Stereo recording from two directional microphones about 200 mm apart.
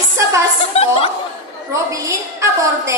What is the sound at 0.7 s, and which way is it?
Speech, 30° left (ahead or behind).